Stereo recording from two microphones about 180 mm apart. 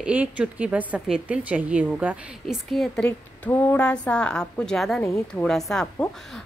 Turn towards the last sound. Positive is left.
turn(degrees=5)  # may be behind; listen again after turning